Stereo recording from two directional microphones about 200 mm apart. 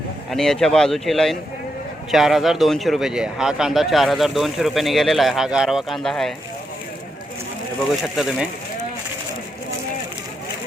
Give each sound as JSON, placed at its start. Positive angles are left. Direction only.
{"t": 0.3, "sound": "speech", "side_deg": 0}
{"t": 8.1, "sound": "speech", "side_deg": 0}